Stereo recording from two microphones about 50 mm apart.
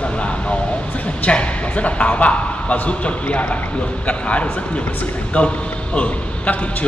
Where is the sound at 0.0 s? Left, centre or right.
Left.